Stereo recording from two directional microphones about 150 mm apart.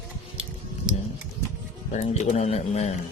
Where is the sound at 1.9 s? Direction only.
50° left (ahead or behind).